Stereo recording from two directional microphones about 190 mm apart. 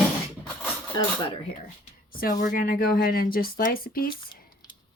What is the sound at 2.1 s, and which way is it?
A woman's voice, 45° left (ahead or behind).